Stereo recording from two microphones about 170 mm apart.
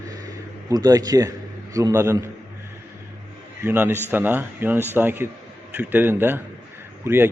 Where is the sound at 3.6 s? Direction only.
15° right (ahead or behind).